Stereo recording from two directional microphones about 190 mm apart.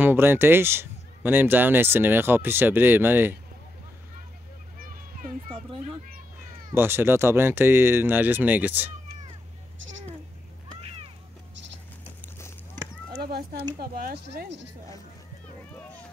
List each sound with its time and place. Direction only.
0.0 s a man's voice: 10° right (ahead or behind)
6.7 s a man's voice: 10° right (ahead or behind)
13.2 s a sound: 55° right (ahead or behind)
13.7 s speech: 50° right (ahead or behind)